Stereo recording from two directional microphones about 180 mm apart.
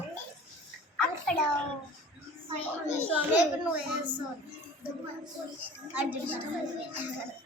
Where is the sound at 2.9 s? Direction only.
10° right (ahead or behind).